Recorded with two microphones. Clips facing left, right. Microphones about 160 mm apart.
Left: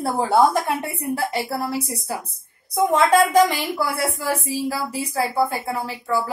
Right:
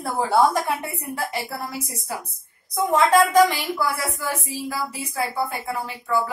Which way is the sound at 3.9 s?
30° left (ahead or behind).